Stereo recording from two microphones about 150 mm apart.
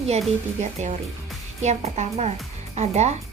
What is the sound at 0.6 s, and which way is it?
Speech, 50° right (ahead or behind).